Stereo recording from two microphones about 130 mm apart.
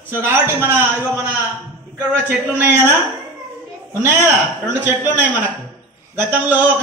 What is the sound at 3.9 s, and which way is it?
A man's voice, 15° right (ahead or behind).